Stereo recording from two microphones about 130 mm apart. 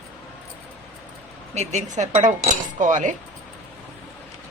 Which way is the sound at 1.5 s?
60° right (ahead or behind).